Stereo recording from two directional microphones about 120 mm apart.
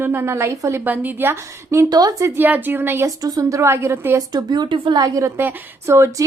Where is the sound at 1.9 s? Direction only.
30° right (ahead or behind).